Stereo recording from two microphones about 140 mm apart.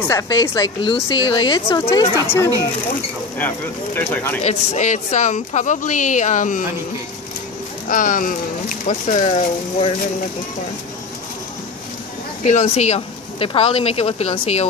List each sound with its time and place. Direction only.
0.1 s a woman's voice: 25° left (ahead or behind)
3.3 s speech: 15° left (ahead or behind)
4.4 s a woman's voice: 55° left (ahead or behind)
7.9 s a woman's voice: 75° left (ahead or behind); by 9.9 s 45° left (ahead or behind)
12.4 s speech: 50° left (ahead or behind)